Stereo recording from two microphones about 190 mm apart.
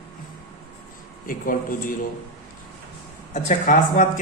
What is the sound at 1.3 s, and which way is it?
Speech, 45° left (ahead or behind).